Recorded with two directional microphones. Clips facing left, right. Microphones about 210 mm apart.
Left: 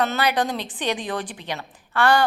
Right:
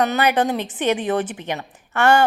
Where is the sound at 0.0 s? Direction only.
15° right (ahead or behind).